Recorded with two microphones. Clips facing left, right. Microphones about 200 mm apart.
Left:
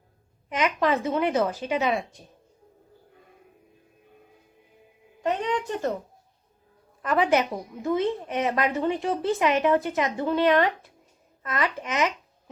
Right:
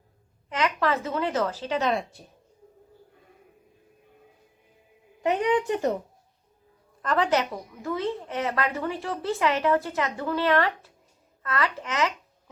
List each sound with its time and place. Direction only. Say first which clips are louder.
0.5 s speech: left 2 dB; 15° left (ahead or behind)
5.2 s a woman's voice: right 3 dB; 15° right (ahead or behind)
7.0 s a woman's voice: left 2 dB; 15° left (ahead or behind)